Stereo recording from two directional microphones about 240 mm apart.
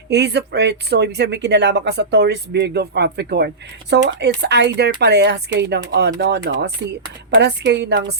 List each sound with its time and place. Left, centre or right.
0.1 s speech: right